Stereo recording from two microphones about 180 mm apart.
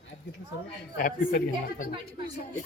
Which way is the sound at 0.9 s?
50° left (ahead or behind).